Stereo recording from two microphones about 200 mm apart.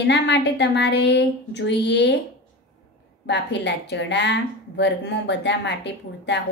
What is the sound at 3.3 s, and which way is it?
Speech, 60° left (ahead or behind).